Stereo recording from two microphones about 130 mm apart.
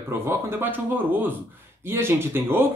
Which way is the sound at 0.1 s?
20° right (ahead or behind).